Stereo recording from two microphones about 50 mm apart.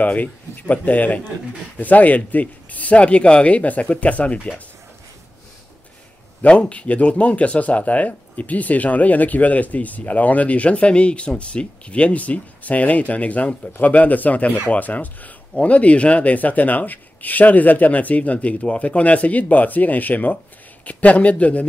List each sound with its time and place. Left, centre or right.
0.0 s speech: left
6.4 s speech: left